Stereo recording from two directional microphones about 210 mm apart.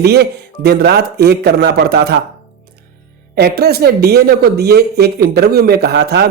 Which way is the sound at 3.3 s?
50° right (ahead or behind).